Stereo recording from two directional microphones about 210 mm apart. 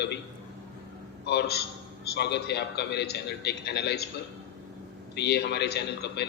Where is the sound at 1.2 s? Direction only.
50° left (ahead or behind).